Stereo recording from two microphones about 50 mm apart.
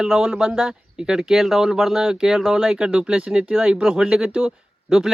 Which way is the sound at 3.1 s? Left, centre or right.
Right.